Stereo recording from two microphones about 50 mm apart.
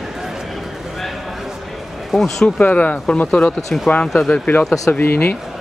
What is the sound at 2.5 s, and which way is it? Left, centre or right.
Speech, left.